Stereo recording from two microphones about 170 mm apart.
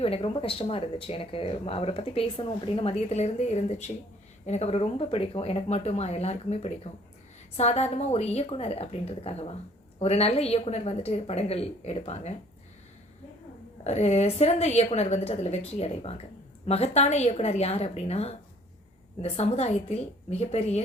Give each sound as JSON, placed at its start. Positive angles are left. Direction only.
{"t": 0.0, "sound": "speech", "side_deg": 35}
{"t": 13.8, "sound": "speech", "side_deg": 40}